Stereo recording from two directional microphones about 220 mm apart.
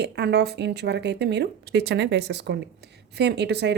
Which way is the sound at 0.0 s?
50° right (ahead or behind).